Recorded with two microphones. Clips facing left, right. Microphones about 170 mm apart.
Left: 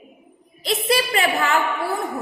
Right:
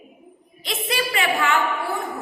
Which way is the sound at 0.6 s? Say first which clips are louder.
Left 5 dB; 35° left (ahead or behind).